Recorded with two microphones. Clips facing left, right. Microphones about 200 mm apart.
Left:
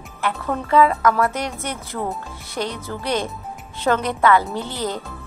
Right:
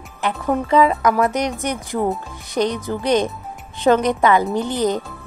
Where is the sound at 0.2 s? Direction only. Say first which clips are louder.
Right 4 dB; 20° right (ahead or behind).